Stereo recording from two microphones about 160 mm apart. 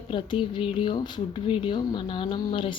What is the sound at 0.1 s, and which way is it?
Speech, 30° left (ahead or behind).